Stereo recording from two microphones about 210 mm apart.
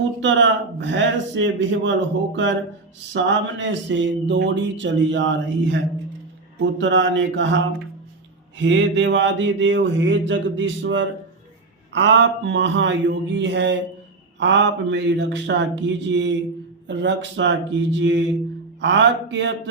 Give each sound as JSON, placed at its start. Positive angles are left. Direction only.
{"t": 0.2, "sound": "speech", "side_deg": -60}
{"t": 8.5, "sound": "speech", "side_deg": -60}